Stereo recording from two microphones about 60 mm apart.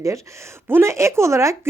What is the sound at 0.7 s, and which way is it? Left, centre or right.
A woman's voice, right.